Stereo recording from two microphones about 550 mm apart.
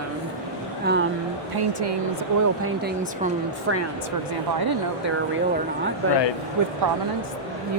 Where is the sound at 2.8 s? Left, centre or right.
Centre.